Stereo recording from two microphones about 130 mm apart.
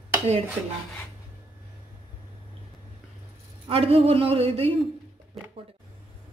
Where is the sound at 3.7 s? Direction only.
45° right (ahead or behind).